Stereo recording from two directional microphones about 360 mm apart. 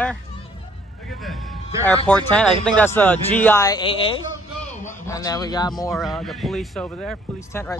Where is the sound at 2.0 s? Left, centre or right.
Centre.